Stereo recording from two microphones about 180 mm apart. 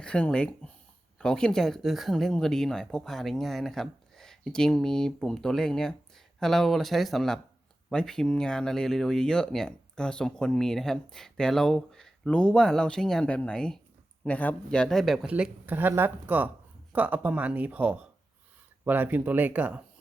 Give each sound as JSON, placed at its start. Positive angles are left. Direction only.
{"t": 0.0, "sound": "speech", "side_deg": 5}